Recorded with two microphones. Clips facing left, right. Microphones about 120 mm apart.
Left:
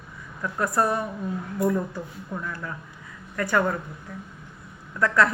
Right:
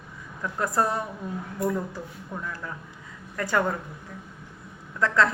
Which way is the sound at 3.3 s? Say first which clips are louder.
Left 2 dB; 25° right (ahead or behind).